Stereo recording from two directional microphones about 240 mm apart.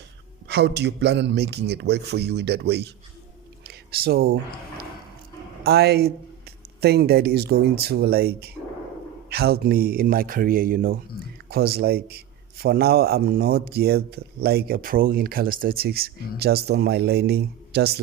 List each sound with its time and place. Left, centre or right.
0.4 s a man's voice: right
3.7 s a sound: right
5.6 s speech: right